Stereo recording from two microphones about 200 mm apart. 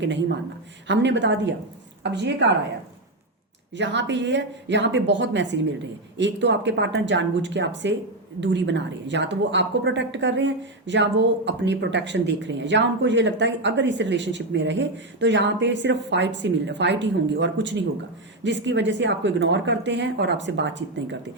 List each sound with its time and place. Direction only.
0.9 s a woman's voice: 65° right (ahead or behind)
3.8 s a woman's voice: 60° right (ahead or behind)